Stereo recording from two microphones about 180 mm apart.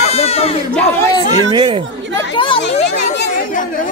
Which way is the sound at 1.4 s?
25° right (ahead or behind).